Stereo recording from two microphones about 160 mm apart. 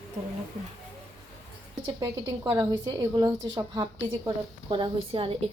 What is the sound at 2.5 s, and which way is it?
A woman's voice, 20° right (ahead or behind).